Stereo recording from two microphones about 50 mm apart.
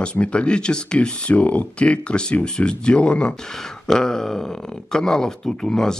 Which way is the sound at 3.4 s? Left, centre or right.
Centre.